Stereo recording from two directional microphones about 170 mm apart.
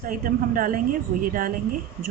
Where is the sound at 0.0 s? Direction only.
55° right (ahead or behind).